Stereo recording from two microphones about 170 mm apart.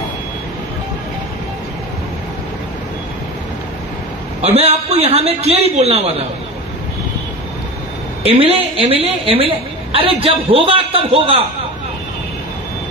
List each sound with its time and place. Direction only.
4.4 s a woman's voice: 40° right (ahead or behind)
8.3 s a woman's voice: 35° right (ahead or behind)